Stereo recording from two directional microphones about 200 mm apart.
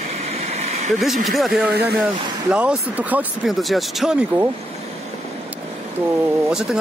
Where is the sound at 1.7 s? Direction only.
55° right (ahead or behind).